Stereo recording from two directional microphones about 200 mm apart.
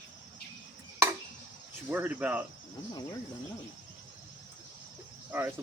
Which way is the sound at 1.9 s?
10° right (ahead or behind).